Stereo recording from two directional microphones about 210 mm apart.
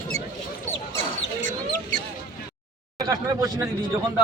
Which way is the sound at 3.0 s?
20° right (ahead or behind).